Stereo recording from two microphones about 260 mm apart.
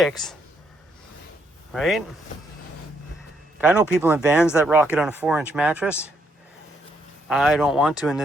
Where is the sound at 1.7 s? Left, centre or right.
Centre.